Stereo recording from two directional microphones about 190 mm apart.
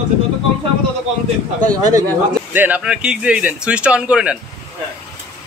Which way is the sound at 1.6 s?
20° right (ahead or behind).